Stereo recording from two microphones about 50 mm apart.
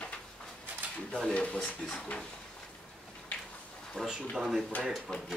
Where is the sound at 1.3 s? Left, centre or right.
Left.